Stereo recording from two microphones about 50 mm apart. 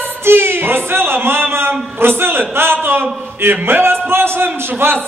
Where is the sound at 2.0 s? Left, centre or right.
Right.